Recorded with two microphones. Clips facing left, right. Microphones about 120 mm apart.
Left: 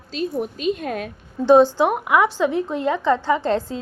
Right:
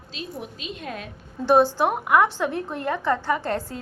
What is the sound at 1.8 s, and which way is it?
A woman's voice, 15° left (ahead or behind).